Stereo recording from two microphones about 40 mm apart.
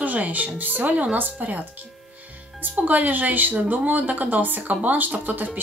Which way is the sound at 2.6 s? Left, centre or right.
Right.